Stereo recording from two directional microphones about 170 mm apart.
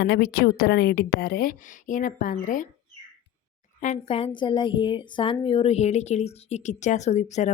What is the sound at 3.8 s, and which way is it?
A woman's voice, 40° left (ahead or behind).